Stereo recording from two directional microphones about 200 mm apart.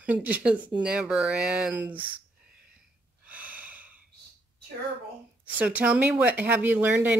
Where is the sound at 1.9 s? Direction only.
25° right (ahead or behind).